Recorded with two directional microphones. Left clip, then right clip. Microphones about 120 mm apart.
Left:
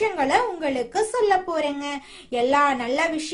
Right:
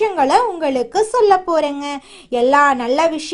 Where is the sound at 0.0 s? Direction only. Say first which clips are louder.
Right 7 dB; 45° right (ahead or behind).